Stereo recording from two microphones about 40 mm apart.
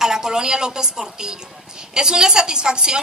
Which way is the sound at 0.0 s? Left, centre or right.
Centre.